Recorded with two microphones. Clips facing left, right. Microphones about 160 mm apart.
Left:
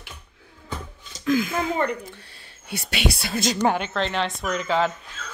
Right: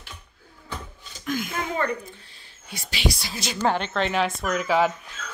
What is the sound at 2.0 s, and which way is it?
Speech, 70° left (ahead or behind).